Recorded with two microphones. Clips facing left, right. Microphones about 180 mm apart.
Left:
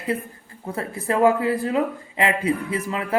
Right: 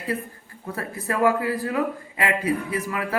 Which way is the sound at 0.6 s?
25° left (ahead or behind).